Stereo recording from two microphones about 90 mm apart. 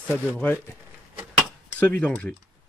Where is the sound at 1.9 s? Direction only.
15° left (ahead or behind).